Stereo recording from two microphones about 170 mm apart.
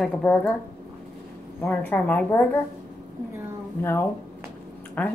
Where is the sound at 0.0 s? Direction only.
5° left (ahead or behind).